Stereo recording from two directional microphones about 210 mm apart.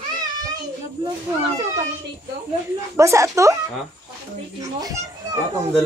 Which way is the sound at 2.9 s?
15° right (ahead or behind).